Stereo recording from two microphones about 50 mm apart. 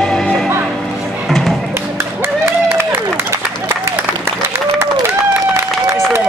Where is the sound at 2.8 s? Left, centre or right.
Right.